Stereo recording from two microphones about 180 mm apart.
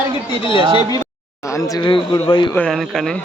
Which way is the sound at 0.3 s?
30° left (ahead or behind).